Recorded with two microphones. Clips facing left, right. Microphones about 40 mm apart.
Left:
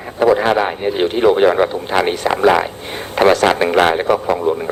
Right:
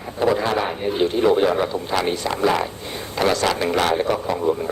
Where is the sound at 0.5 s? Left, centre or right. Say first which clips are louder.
Left 5 dB; left.